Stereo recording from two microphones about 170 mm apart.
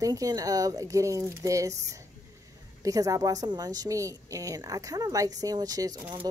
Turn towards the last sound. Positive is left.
turn(degrees=-25)  # may be behind; listen again after turning